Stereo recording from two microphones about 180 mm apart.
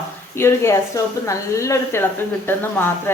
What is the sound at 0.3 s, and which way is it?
Speech, 15° left (ahead or behind).